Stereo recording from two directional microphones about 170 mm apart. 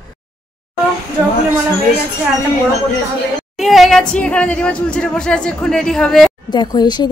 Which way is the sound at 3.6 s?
Centre (ahead or behind).